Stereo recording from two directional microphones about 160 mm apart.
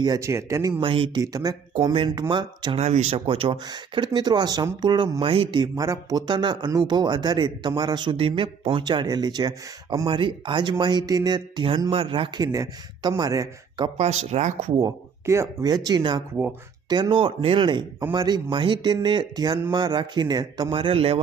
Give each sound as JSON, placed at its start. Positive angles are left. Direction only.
{"t": 0.0, "sound": "speech", "side_deg": -20}
{"t": 0.8, "sound": "speech", "side_deg": -35}
{"t": 1.2, "sound": "speech", "side_deg": -20}
{"t": 2.7, "sound": "speech", "side_deg": -40}
{"t": 13.9, "sound": "speech", "side_deg": -45}
{"t": 14.8, "sound": "speech", "side_deg": -20}